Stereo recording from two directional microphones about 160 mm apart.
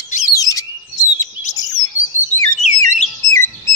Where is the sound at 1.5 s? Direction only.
20° left (ahead or behind).